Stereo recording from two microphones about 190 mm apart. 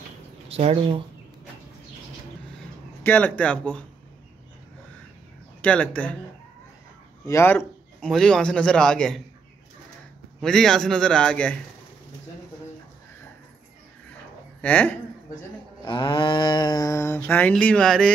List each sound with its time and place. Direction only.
0.5 s speech: 30° right (ahead or behind)
3.0 s mantra: 10° left (ahead or behind)
5.6 s mantra: 5° left (ahead or behind)
7.2 s a man's voice: 10° left (ahead or behind)
10.4 s a man's voice: 5° left (ahead or behind)
14.6 s mantra: 10° left (ahead or behind)
15.8 s mantra: 25° left (ahead or behind); by 18.1 s 5° left (ahead or behind)